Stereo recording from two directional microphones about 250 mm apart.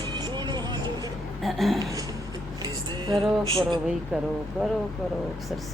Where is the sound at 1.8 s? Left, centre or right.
Centre.